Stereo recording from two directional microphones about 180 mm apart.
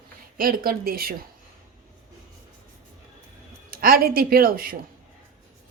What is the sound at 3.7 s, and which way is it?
Speech, 55° right (ahead or behind).